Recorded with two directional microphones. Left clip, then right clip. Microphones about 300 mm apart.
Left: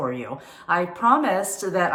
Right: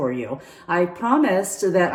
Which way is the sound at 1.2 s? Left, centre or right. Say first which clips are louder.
Right 3 dB; centre.